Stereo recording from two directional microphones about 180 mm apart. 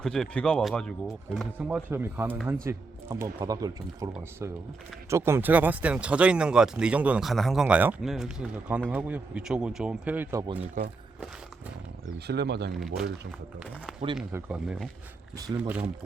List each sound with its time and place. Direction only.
0.0 s speech: 5° left (ahead or behind)
12.3 s speech: 65° right (ahead or behind)
12.7 s speech: centre (ahead or behind)
14.3 s speech: 5° right (ahead or behind)
15.5 s speech: 20° right (ahead or behind)